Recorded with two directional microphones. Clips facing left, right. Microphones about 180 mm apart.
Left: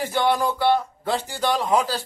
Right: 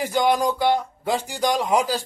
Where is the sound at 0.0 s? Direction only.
15° right (ahead or behind).